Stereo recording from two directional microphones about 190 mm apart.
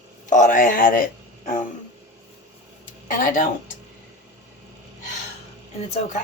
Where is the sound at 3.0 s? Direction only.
45° left (ahead or behind).